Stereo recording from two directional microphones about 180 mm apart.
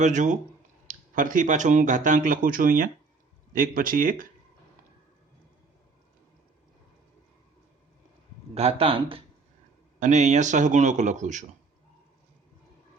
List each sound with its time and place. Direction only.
0.0 s speech: 45° right (ahead or behind)
8.5 s speech: 35° right (ahead or behind)
10.0 s speech: 40° right (ahead or behind)